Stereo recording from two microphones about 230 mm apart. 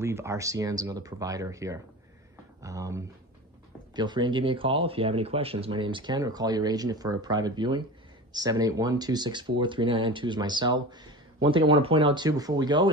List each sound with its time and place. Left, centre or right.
0.0 s speech: centre